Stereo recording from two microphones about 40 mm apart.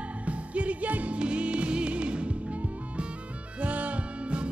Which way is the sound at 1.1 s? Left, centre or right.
Right.